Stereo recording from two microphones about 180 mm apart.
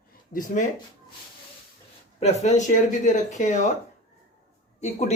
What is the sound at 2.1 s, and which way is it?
Speech, 40° left (ahead or behind).